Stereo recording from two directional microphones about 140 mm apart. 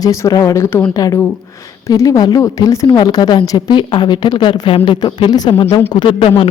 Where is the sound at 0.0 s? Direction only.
20° left (ahead or behind).